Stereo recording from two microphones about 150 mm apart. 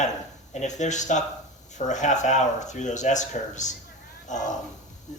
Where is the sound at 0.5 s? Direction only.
50° left (ahead or behind).